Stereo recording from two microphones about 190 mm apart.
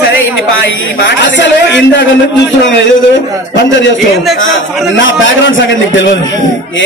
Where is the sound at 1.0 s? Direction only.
70° left (ahead or behind).